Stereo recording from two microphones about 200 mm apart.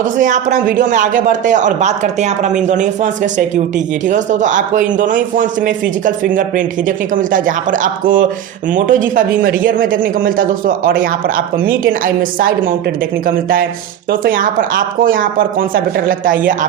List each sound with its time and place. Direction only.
0.0 s speech: 40° right (ahead or behind)